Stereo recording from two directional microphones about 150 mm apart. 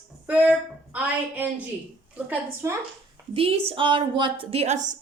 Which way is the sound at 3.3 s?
40° right (ahead or behind).